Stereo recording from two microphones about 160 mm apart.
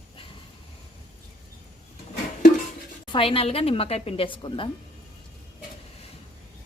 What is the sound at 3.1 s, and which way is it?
A woman's voice, 35° left (ahead or behind).